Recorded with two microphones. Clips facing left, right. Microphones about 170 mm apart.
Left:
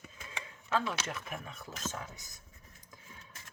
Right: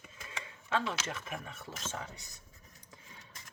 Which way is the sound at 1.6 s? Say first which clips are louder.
Left 1 dB; 30° right (ahead or behind).